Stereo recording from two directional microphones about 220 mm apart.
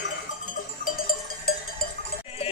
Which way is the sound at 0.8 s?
40° left (ahead or behind).